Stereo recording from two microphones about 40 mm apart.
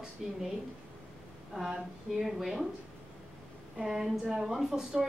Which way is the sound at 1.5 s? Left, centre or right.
Centre.